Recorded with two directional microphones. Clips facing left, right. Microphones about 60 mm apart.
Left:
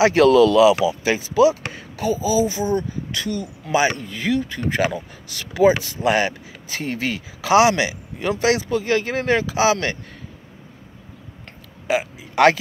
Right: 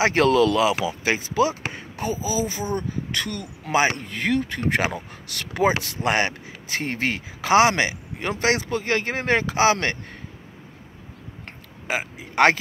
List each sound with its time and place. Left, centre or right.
0.0 s speech: right
1.7 s a sound: right
2.1 s speech: right
3.2 s speech: right
3.7 s speech: right
4.0 s speech: right
11.9 s a sound: right